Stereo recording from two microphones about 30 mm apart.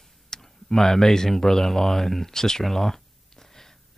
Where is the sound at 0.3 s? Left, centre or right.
Centre.